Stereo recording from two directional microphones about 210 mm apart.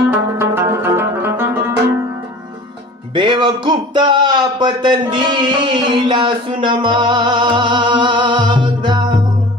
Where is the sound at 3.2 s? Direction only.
20° right (ahead or behind).